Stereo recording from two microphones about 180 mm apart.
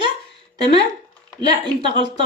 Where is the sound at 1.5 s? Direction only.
25° right (ahead or behind).